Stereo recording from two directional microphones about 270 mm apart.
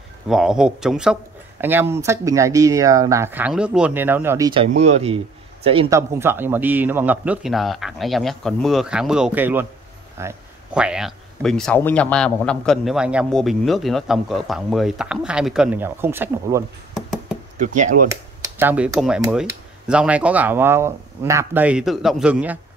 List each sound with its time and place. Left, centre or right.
0.3 s speech: centre
17.6 s speech: right
18.6 s speech: centre